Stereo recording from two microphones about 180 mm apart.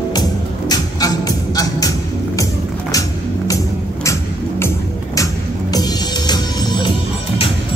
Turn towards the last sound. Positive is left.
turn(degrees=25)  # may be behind; listen again after turning